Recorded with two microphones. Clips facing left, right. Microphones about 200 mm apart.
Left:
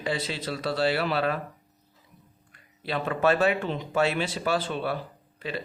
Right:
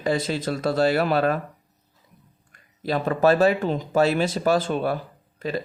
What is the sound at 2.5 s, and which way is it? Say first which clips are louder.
Speech: right 6 dB; 40° right (ahead or behind).